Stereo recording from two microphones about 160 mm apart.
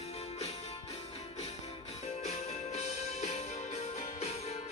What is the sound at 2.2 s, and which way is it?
Music, 40° left (ahead or behind).